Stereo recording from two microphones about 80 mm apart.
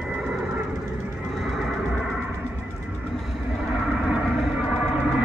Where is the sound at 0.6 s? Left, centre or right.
Centre.